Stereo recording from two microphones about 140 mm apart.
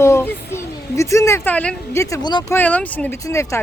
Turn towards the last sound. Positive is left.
turn(degrees=20)  # may be behind; listen again after turning